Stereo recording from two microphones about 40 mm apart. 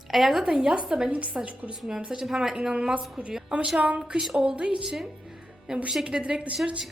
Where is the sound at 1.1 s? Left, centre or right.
Right.